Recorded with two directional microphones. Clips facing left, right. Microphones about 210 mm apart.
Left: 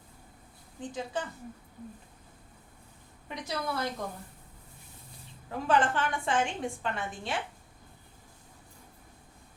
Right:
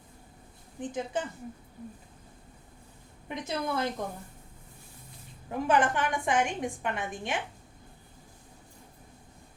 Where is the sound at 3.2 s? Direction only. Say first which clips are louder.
Right 2 dB; 20° right (ahead or behind).